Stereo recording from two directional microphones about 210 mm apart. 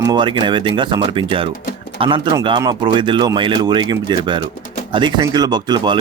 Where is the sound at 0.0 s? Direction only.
20° right (ahead or behind).